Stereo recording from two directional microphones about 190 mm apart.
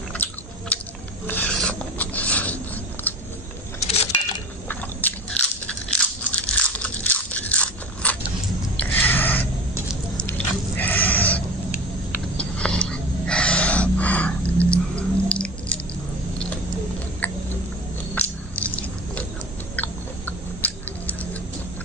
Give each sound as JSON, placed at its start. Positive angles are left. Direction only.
{"t": 0.1, "sound": "chewing", "side_deg": 5}
{"t": 1.2, "sound": "filing", "side_deg": 10}
{"t": 3.8, "sound": "keys jangling", "side_deg": 35}
{"t": 5.0, "sound": "biting", "side_deg": 10}
{"t": 6.3, "sound": "biting", "side_deg": 5}
{"t": 8.7, "sound": "a sound", "side_deg": 10}
{"t": 17.2, "sound": "cat", "side_deg": 10}
{"t": 18.1, "sound": "biting", "side_deg": 10}
{"t": 19.7, "sound": "a sound", "side_deg": 10}